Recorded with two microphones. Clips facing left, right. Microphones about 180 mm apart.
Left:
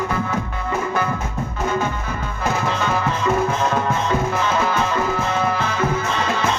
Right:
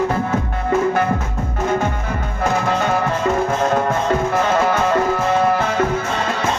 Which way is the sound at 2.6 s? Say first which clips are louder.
Right 3 dB; 55° right (ahead or behind).